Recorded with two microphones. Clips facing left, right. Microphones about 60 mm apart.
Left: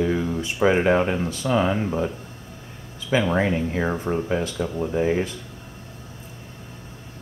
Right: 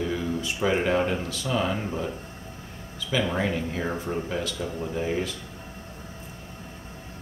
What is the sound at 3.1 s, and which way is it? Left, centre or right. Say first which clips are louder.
Speech: left 5 dB; left.